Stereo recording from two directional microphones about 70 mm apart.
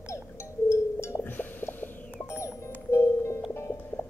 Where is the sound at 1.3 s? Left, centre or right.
Left.